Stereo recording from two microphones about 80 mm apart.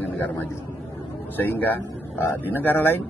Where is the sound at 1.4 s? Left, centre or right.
Left.